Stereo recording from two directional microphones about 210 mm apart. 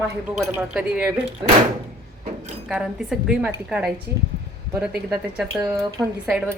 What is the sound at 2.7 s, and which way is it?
A woman's voice, 5° right (ahead or behind).